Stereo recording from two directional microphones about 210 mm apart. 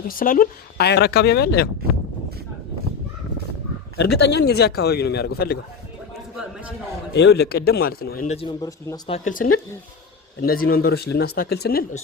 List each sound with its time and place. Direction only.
0.1 s speech: 40° left (ahead or behind)
3.9 s speech: 50° left (ahead or behind)
7.1 s speech: 55° left (ahead or behind)
8.3 s speech: 25° left (ahead or behind)
9.1 s speech: 40° left (ahead or behind)